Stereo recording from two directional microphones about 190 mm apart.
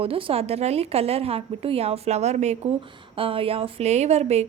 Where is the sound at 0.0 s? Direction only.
30° right (ahead or behind).